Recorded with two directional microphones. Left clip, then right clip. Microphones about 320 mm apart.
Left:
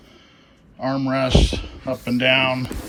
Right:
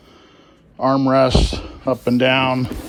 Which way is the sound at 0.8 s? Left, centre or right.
Centre.